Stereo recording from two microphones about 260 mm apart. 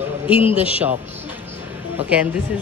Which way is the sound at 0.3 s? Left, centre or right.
Left.